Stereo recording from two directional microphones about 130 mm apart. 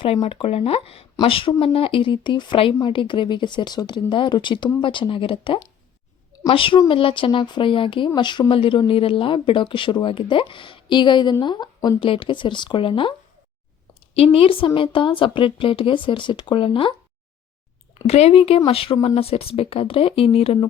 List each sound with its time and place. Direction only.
0.0 s speech: 45° left (ahead or behind)
14.3 s speech: 45° left (ahead or behind)
18.1 s speech: 50° left (ahead or behind)